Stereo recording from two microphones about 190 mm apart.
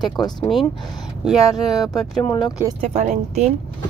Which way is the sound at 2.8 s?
35° right (ahead or behind).